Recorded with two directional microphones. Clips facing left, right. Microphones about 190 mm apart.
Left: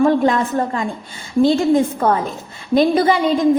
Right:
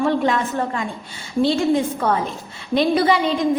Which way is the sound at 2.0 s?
45° left (ahead or behind).